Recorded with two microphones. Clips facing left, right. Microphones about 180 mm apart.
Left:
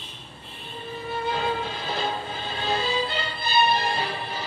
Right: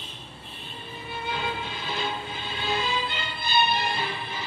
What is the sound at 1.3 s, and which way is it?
Music, 40° left (ahead or behind).